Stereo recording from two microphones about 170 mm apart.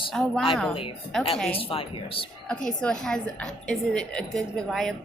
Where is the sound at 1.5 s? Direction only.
35° left (ahead or behind).